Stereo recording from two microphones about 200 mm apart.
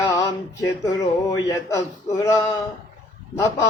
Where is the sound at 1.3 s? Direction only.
15° left (ahead or behind).